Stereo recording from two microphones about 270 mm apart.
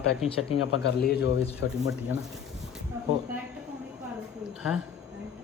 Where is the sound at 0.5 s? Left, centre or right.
Left.